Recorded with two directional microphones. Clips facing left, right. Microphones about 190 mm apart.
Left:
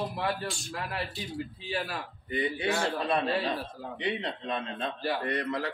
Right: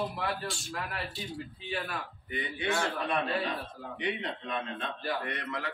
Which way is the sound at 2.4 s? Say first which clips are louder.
Left 2 dB; 35° left (ahead or behind).